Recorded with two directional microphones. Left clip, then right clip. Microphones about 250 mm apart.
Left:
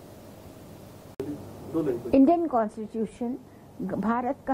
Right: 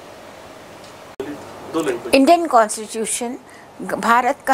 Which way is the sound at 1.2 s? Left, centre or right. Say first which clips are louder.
Right 6 dB; centre.